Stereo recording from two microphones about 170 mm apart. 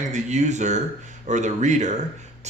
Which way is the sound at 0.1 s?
45° right (ahead or behind).